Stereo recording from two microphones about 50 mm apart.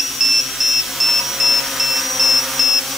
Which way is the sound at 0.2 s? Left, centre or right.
Centre.